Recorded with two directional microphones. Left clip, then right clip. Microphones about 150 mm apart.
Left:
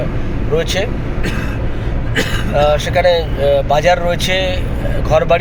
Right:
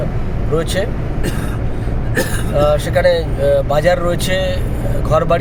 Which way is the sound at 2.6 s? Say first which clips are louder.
Left 1 dB; 25° right (ahead or behind).